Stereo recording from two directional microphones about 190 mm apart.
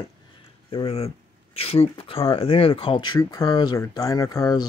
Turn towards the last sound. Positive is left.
turn(degrees=20)  # may be behind; listen again after turning